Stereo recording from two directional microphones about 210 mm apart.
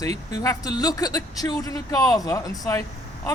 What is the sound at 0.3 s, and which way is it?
Speech, 15° left (ahead or behind).